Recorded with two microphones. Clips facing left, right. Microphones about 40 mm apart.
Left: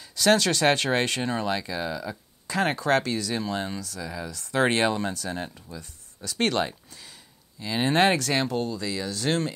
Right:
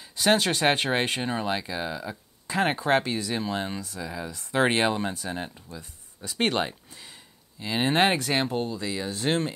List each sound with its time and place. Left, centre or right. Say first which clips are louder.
0.1 s speech: left 1 dB; right